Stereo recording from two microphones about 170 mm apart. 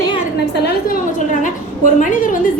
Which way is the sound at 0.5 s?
75° left (ahead or behind).